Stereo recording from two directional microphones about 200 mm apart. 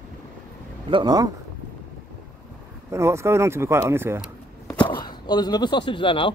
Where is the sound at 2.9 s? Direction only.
15° right (ahead or behind).